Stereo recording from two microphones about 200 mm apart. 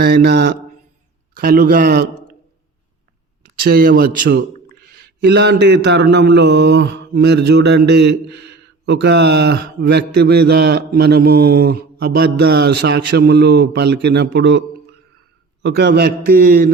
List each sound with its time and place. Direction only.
0.0 s mantra: 50° right (ahead or behind)
1.4 s a man's voice: 45° right (ahead or behind)
3.6 s a man's voice: 50° right (ahead or behind)
5.2 s mantra: 55° right (ahead or behind)
15.6 s a man's voice: 55° right (ahead or behind)